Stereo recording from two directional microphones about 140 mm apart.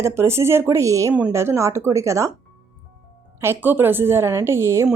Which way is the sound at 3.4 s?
15° right (ahead or behind).